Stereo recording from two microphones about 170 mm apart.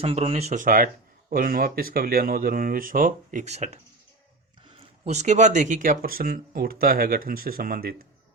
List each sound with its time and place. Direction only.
0.0 s speech: 35° right (ahead or behind); by 7.9 s 60° right (ahead or behind)